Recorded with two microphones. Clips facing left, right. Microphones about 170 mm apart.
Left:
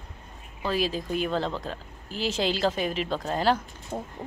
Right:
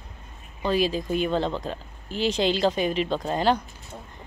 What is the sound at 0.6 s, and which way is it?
Speech, centre (ahead or behind).